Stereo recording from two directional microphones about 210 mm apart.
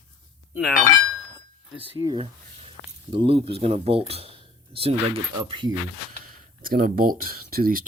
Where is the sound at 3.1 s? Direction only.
25° right (ahead or behind).